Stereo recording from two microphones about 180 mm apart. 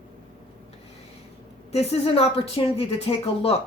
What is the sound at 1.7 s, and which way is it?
A woman's voice, 35° left (ahead or behind).